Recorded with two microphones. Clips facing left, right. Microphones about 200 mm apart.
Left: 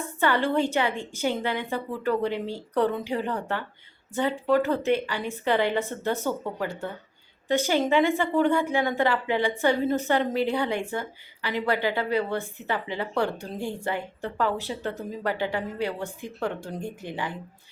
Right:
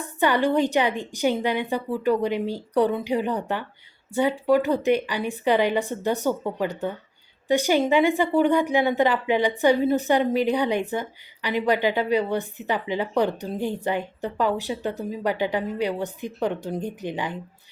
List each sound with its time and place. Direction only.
0.2 s speech: 15° right (ahead or behind)